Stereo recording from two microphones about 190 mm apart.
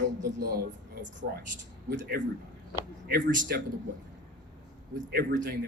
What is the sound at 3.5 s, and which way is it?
Speech, 55° right (ahead or behind).